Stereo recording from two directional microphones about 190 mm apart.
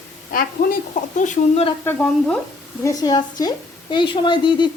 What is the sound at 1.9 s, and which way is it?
Stir, 5° left (ahead or behind).